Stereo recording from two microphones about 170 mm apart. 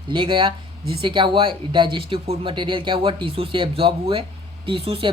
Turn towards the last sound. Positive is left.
turn(degrees=-35)  # may be behind; listen again after turning